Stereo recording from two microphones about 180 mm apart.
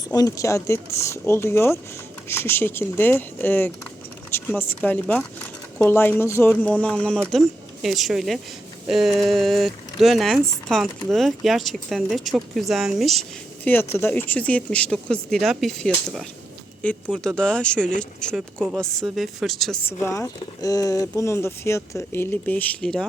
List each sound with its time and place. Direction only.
0.1 s speech: 20° left (ahead or behind); by 13.2 s centre (ahead or behind)
13.7 s speech: 10° left (ahead or behind)
19.9 s speech: 15° left (ahead or behind)